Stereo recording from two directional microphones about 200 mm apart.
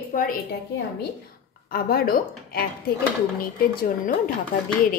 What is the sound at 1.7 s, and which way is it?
A woman's voice, 50° left (ahead or behind).